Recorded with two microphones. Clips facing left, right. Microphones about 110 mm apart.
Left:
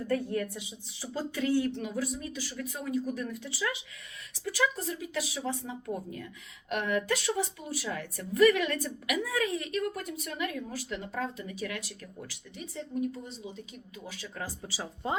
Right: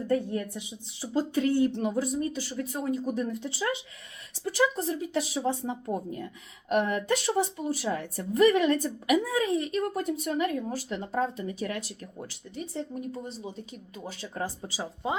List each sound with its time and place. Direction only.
0.1 s a woman's voice: 20° right (ahead or behind)